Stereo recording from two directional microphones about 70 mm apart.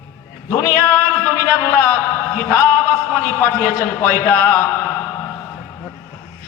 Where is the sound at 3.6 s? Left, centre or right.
Left.